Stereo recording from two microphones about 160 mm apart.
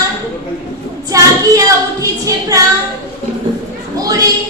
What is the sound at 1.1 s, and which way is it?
Child singing, 20° right (ahead or behind).